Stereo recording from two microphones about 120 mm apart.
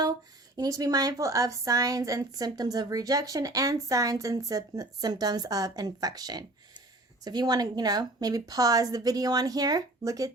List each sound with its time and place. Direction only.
0.5 s a woman's voice: 30° right (ahead or behind)